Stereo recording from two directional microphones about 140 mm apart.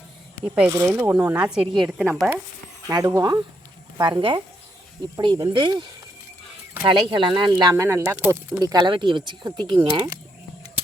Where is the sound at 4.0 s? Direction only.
35° right (ahead or behind).